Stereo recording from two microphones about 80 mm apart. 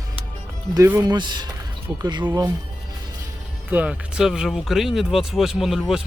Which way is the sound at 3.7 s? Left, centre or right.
Centre.